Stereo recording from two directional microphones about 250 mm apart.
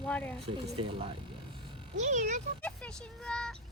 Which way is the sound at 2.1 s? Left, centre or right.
Right.